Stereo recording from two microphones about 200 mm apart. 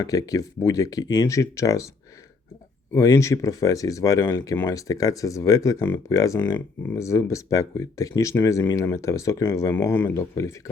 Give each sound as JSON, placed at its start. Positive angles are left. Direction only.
{"t": 0.0, "sound": "speech", "side_deg": 15}
{"t": 2.9, "sound": "speech", "side_deg": 15}